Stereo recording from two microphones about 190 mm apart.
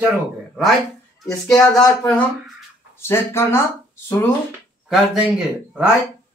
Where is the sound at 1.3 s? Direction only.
15° left (ahead or behind).